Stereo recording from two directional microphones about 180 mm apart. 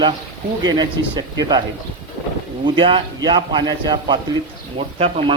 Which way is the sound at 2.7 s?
25° right (ahead or behind).